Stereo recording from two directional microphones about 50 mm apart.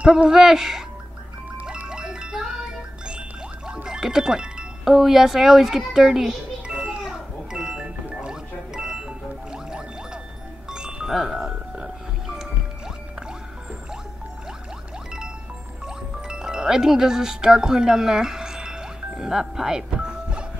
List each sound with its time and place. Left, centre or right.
0.0 s a man's voice: right
0.3 s a man's voice: centre
1.6 s music: right
3.6 s speech: centre
7.0 s a sound: centre
7.8 s music: right
8.3 s music: centre
16.3 s music: centre